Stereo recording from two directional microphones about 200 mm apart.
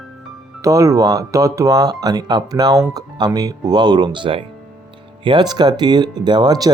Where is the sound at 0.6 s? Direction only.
15° right (ahead or behind).